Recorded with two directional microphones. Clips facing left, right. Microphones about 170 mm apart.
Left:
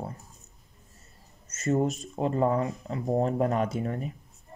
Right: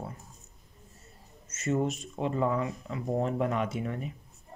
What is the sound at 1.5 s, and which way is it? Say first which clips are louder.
Speech: left 3 dB; 40° left (ahead or behind).